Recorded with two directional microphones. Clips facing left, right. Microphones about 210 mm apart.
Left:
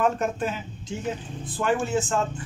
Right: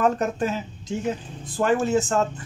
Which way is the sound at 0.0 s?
40° right (ahead or behind).